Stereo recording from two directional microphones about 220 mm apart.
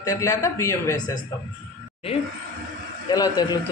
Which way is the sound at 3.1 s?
20° left (ahead or behind).